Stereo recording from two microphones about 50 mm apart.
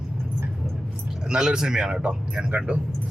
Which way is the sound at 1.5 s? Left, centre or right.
Centre.